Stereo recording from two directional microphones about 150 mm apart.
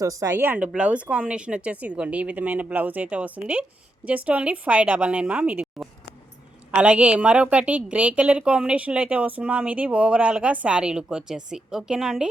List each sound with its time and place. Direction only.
0.0 s speech: 20° right (ahead or behind); by 12.3 s 5° right (ahead or behind)